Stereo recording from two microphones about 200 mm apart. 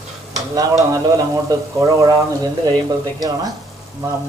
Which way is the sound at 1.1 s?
15° right (ahead or behind).